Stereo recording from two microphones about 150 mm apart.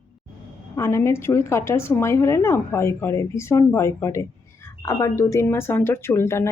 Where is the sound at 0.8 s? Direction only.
20° left (ahead or behind).